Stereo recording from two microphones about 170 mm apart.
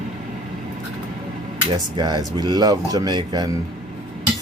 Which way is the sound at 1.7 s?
25° right (ahead or behind).